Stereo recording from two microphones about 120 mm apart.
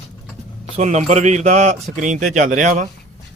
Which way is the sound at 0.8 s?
75° right (ahead or behind).